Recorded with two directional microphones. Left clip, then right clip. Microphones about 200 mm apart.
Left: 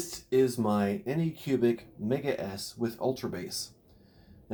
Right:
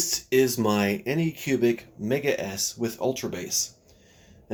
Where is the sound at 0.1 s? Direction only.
30° right (ahead or behind).